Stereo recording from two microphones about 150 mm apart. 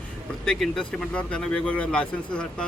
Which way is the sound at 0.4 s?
Centre (ahead or behind).